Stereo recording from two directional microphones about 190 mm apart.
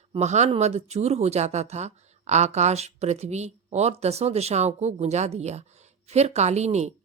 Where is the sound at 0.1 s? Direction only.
35° right (ahead or behind).